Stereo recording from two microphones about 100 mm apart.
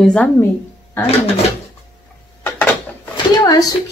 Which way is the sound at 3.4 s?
35° left (ahead or behind).